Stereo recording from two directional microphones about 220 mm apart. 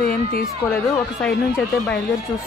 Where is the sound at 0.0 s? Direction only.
40° left (ahead or behind).